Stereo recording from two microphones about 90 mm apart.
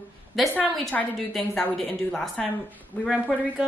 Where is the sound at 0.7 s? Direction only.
Centre (ahead or behind).